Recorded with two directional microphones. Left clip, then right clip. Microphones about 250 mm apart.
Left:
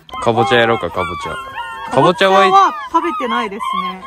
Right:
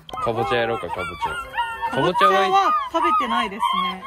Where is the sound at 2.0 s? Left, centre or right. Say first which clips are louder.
Left 7 dB; left.